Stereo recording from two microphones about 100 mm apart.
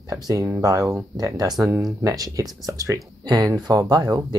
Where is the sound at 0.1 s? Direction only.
35° right (ahead or behind).